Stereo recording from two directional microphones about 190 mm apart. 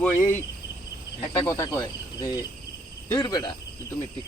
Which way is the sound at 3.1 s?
20° left (ahead or behind).